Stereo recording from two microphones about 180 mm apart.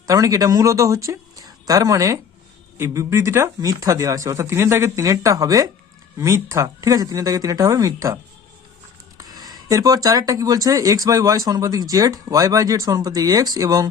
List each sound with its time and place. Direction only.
0.1 s speech: 20° right (ahead or behind)